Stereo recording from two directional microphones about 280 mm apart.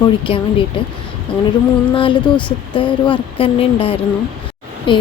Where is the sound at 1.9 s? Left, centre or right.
Centre.